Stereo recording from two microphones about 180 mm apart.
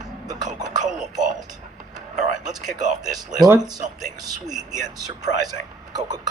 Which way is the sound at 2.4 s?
20° right (ahead or behind).